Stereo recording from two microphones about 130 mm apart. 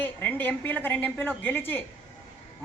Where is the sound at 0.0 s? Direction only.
15° left (ahead or behind).